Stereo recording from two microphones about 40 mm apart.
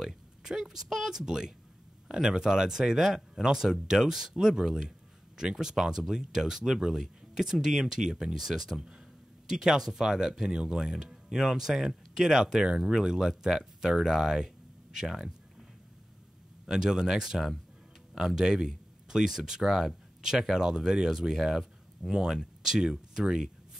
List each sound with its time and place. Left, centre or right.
0.0 s speech: centre
16.6 s speech: centre